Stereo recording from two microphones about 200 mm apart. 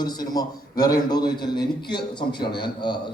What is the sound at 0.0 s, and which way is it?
A man's voice, 20° left (ahead or behind).